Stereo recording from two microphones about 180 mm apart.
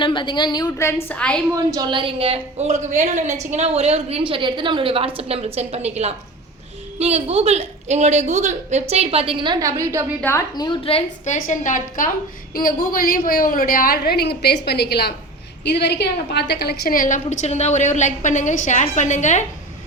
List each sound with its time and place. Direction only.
0.0 s a woman's voice: 25° left (ahead or behind); by 1.4 s 5° left (ahead or behind)
1.5 s a woman's voice: 20° right (ahead or behind)
10.2 s a woman's voice: 15° left (ahead or behind)
10.5 s a woman's voice: 25° left (ahead or behind)
11.3 s a woman's voice: 45° left (ahead or behind)